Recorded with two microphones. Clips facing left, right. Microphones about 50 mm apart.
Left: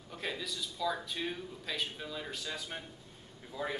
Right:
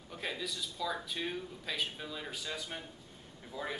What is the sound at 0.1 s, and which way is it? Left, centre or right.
A man's voice, centre.